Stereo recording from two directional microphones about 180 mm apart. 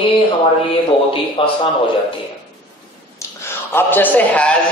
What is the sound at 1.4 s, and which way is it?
Speech, 30° left (ahead or behind).